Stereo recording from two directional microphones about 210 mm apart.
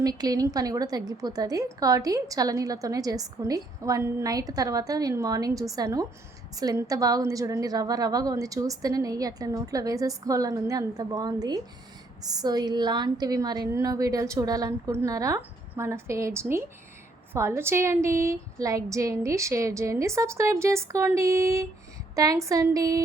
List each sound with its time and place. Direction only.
0.0 s a woman's voice: 15° right (ahead or behind)